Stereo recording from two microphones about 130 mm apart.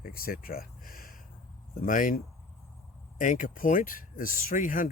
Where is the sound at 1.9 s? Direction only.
90° left.